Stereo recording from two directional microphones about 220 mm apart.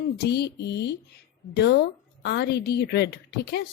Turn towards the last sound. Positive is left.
turn(degrees=50)  # may be behind; listen again after turning